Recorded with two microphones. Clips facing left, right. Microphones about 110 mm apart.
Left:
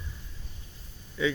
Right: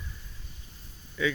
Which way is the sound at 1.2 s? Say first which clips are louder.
Left 1 dB; 25° left (ahead or behind).